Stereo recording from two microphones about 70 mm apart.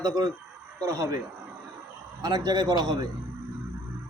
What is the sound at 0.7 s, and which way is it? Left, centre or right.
Speech, right.